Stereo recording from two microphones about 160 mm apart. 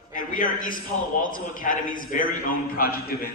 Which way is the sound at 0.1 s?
55° left (ahead or behind).